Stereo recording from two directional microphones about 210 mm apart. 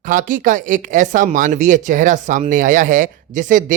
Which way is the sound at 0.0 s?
40° right (ahead or behind).